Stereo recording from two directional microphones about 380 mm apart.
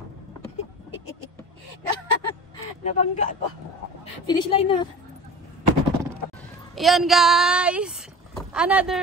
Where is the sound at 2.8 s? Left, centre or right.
Centre.